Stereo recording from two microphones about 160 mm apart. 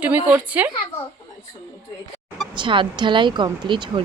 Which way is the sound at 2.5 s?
30° right (ahead or behind).